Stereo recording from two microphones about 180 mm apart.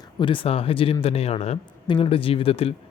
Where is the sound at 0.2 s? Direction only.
30° left (ahead or behind).